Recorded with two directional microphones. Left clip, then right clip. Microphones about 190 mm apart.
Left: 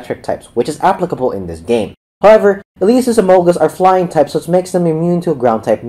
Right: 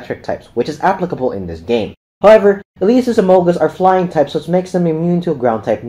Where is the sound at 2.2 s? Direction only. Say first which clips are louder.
Even; 30° left (ahead or behind).